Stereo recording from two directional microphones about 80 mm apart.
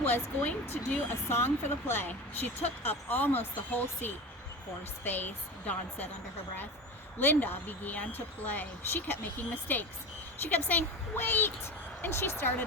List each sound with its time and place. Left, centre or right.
0.0 s speech: left
7.2 s speech: left